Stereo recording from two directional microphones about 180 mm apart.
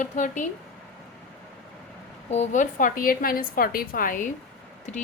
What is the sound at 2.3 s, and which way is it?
A woman's voice, 40° left (ahead or behind).